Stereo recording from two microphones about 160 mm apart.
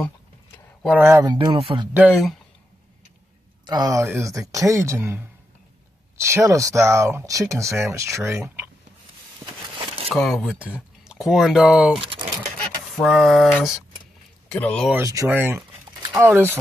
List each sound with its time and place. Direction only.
0.8 s speech: 15° right (ahead or behind); by 1.9 s 30° right (ahead or behind)
2.0 s speech: 5° right (ahead or behind)
3.6 s speech: 25° right (ahead or behind)
10.0 s speech: centre (ahead or behind)
12.0 s speech: 35° right (ahead or behind)
12.9 s speech: centre (ahead or behind)
15.0 s speech: 15° right (ahead or behind)